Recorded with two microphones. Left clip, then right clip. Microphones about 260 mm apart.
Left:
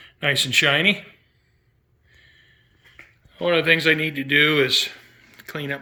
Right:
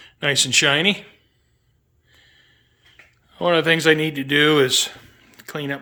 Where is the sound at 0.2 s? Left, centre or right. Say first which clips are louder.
Right 1 dB; centre.